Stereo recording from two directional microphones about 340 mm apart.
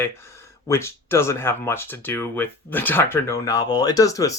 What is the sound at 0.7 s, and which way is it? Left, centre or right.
Speech, centre.